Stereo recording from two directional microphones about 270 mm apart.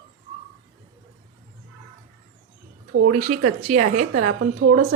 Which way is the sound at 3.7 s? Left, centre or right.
Right.